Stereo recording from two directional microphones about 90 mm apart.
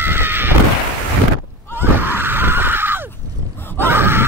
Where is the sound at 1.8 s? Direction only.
25° right (ahead or behind).